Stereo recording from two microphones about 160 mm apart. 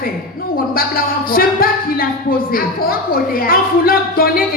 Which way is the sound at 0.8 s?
65° left (ahead or behind).